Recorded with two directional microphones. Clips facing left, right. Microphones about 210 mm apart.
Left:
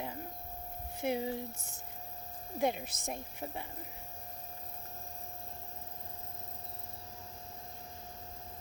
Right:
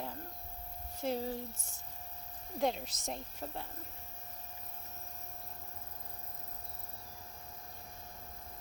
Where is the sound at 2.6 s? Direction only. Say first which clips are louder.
Left 1 dB; 10° left (ahead or behind).